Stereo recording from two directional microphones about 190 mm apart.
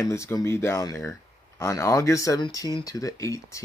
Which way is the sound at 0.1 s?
15° left (ahead or behind).